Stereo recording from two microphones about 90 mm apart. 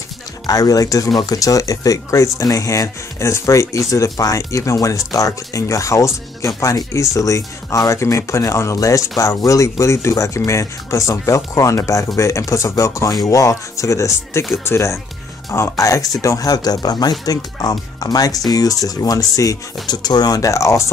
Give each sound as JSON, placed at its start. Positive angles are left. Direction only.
{"t": 0.5, "sound": "speech", "side_deg": 40}